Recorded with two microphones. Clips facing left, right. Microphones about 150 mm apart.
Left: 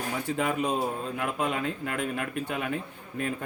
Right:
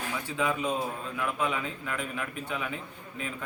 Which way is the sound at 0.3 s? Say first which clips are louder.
Left 2 dB; 50° left (ahead or behind).